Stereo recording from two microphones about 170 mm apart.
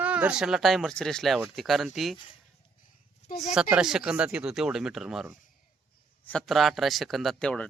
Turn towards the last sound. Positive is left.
turn(degrees=5)  # may be behind; listen again after turning